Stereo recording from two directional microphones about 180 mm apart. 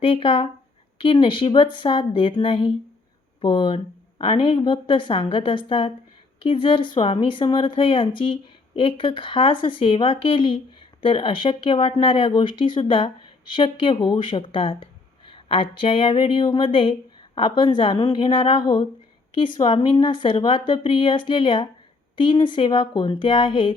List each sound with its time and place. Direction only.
0.0 s a woman's voice: 30° left (ahead or behind)